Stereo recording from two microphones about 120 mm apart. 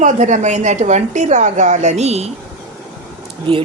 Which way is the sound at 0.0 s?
90° right.